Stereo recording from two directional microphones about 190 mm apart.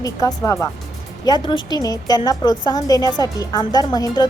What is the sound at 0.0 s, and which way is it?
A woman's voice, 20° left (ahead or behind).